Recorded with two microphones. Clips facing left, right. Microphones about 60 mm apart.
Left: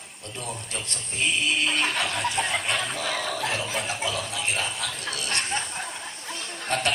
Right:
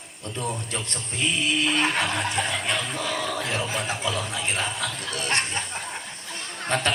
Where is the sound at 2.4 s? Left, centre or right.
Left.